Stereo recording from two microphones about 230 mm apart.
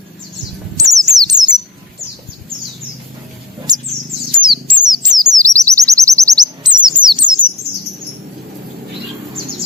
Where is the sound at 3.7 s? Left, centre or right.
Centre.